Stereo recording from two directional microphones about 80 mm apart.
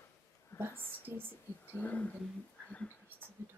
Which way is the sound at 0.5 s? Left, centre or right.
Left.